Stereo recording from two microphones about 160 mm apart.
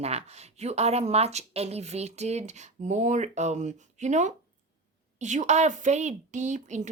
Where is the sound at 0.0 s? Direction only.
40° right (ahead or behind).